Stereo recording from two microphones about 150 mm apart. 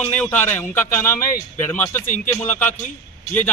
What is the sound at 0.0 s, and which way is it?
Speech, 10° left (ahead or behind).